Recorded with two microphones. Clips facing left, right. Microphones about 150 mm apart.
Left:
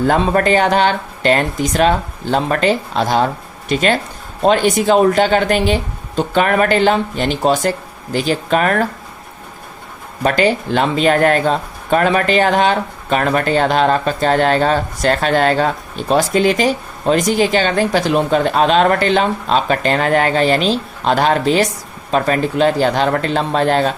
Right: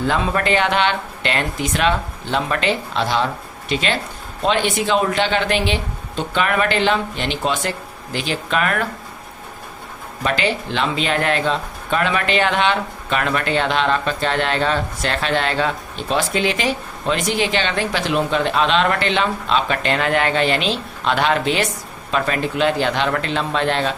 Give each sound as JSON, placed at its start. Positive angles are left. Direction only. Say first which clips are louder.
{"t": 0.1, "sound": "speech", "louder": "left 5 dB", "side_deg": 40}
{"t": 10.2, "sound": "speech", "louder": "left 6 dB", "side_deg": 45}